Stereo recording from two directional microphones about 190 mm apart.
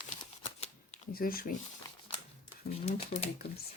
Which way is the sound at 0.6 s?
35° left (ahead or behind).